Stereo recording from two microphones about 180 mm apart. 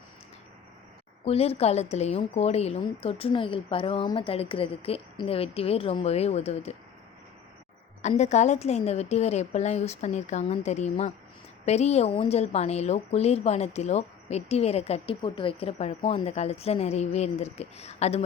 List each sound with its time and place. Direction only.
1.2 s a woman's voice: 35° left (ahead or behind)
8.0 s a woman's voice: 40° left (ahead or behind)